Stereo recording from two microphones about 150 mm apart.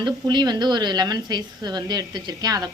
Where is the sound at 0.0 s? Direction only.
30° right (ahead or behind).